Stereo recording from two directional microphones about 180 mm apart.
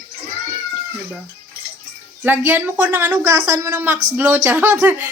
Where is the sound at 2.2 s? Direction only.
10° right (ahead or behind).